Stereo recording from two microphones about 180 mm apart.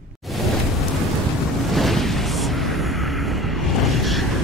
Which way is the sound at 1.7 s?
Centre (ahead or behind).